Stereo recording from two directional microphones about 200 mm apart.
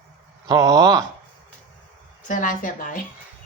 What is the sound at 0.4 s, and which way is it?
Speech, 15° right (ahead or behind).